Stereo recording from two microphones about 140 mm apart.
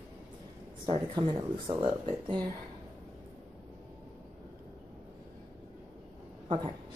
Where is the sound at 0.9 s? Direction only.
35° right (ahead or behind).